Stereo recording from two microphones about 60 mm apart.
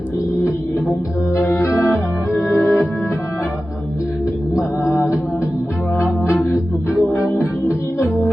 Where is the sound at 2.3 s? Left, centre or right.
Centre.